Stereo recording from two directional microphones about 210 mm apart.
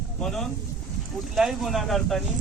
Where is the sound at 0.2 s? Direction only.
Centre (ahead or behind).